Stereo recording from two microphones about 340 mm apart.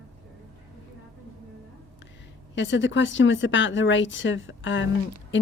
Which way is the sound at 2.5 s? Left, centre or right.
Left.